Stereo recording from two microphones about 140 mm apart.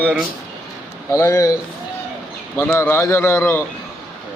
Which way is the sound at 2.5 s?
15° left (ahead or behind).